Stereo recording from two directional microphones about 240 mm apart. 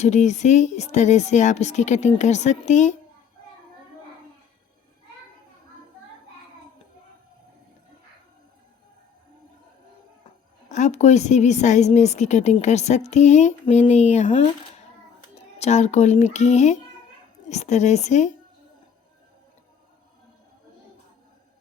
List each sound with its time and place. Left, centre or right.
0.0 s a woman's voice: left
10.7 s a woman's voice: left